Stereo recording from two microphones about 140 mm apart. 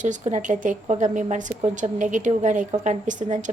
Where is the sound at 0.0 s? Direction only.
60° right (ahead or behind).